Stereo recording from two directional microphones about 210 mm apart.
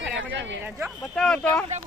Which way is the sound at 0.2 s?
60° right (ahead or behind).